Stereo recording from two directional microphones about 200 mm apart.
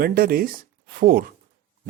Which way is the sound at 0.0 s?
50° right (ahead or behind).